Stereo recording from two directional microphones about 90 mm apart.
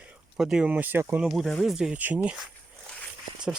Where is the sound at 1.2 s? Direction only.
Centre (ahead or behind).